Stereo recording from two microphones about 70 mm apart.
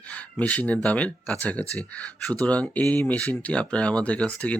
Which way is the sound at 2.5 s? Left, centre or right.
Centre.